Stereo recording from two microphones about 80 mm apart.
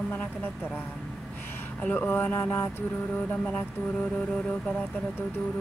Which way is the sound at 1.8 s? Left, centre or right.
Left.